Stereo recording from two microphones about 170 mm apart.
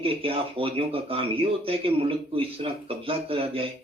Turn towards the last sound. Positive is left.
turn(degrees=-35)  # may be behind; listen again after turning